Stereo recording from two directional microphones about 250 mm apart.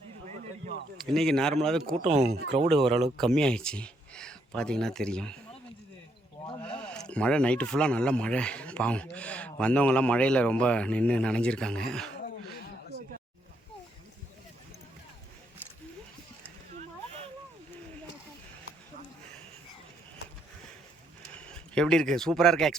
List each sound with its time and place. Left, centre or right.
1.0 s speech: centre
2.0 s speech: right
2.6 s speech: centre
6.6 s speech: centre
12.9 s a sound: left
21.3 s speech: centre